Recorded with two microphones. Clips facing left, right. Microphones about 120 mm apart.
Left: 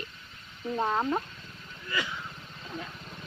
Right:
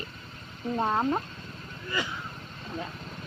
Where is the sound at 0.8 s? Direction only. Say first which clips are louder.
Right 1 dB; 10° right (ahead or behind).